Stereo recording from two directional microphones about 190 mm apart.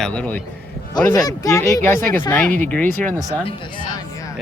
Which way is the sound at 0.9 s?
20° left (ahead or behind).